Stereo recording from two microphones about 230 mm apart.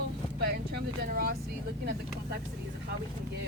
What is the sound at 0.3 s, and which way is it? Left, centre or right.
Vehicle, right.